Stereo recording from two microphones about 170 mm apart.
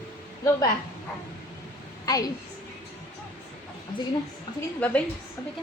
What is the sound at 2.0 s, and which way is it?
Speech, 20° left (ahead or behind).